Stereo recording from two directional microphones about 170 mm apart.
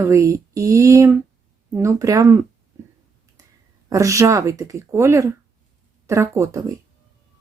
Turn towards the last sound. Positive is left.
turn(degrees=-20)  # may be behind; listen again after turning